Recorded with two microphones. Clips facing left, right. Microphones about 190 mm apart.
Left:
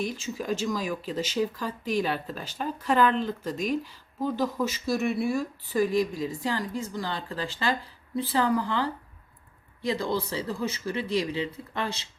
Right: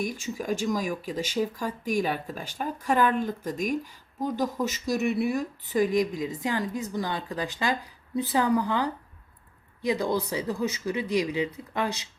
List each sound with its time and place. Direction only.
0.0 s speech: 15° right (ahead or behind)